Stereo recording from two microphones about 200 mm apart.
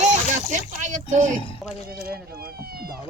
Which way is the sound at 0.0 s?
35° right (ahead or behind).